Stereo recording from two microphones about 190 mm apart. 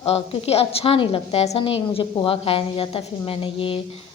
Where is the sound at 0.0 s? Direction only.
30° left (ahead or behind).